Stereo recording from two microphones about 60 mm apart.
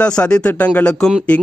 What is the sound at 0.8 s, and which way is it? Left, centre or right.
Speech, centre.